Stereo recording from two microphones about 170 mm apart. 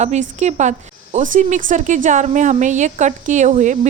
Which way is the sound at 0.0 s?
45° right (ahead or behind).